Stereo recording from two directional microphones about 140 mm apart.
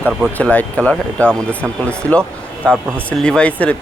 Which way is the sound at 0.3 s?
10° left (ahead or behind).